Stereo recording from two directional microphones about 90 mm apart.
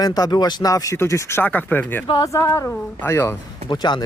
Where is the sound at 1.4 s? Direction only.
20° left (ahead or behind).